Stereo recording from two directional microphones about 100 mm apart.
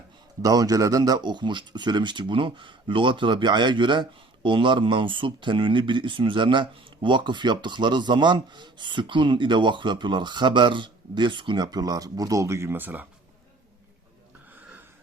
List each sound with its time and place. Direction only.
0.4 s speech: 40° right (ahead or behind); by 13.1 s 20° right (ahead or behind)